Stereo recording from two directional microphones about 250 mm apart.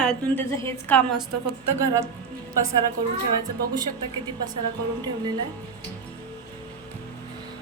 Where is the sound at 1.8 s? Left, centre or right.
Centre.